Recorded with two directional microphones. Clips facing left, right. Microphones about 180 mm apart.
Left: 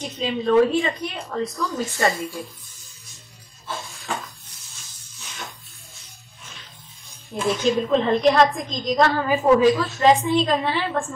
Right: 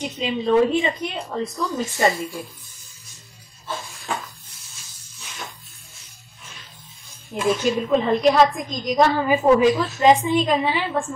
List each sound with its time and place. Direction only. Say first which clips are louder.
0.0 s a woman's voice: even; 15° right (ahead or behind)
7.3 s a woman's voice: even; 10° right (ahead or behind)